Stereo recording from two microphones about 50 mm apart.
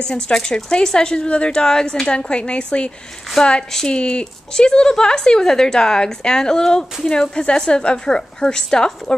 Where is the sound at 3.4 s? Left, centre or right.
Centre.